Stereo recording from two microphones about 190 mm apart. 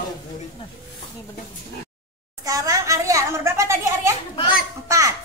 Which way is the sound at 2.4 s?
20° right (ahead or behind).